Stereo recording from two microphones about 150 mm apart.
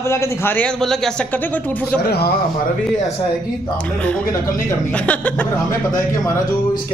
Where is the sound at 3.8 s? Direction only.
10° left (ahead or behind).